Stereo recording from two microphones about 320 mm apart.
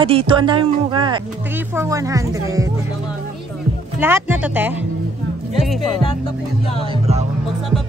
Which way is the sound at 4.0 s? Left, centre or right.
Centre.